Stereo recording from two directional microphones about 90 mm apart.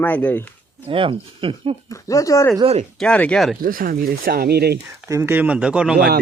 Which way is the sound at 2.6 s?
90° right.